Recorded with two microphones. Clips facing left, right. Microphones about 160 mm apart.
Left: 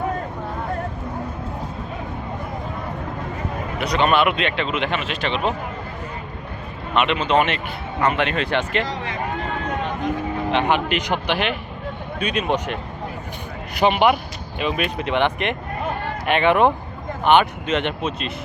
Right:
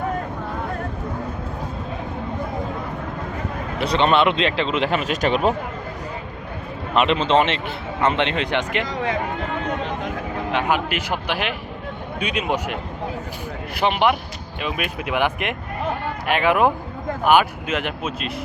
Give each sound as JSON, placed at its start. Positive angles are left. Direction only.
{"t": 3.8, "sound": "speech", "side_deg": -30}
{"t": 6.9, "sound": "speech", "side_deg": -35}
{"t": 10.5, "sound": "speech", "side_deg": -5}
{"t": 13.7, "sound": "speech", "side_deg": 0}